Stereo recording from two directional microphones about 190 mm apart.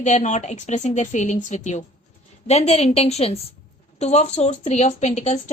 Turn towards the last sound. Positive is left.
turn(degrees=35)  # may be behind; listen again after turning